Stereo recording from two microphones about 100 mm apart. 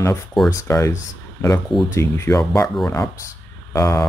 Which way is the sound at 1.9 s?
30° left (ahead or behind).